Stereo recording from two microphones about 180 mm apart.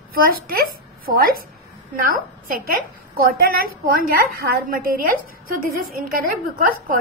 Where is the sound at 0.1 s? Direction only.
55° right (ahead or behind).